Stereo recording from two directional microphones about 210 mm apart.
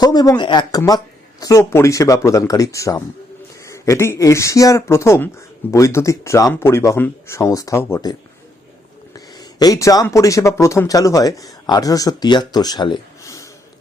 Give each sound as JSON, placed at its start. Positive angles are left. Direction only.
{"t": 0.0, "sound": "speech", "side_deg": 20}
{"t": 9.1, "sound": "speech", "side_deg": 20}